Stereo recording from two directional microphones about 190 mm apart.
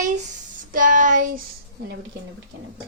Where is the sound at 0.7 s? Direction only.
45° right (ahead or behind).